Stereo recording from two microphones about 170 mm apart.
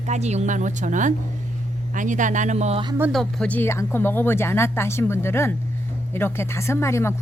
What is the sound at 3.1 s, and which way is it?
Speech, 5° left (ahead or behind).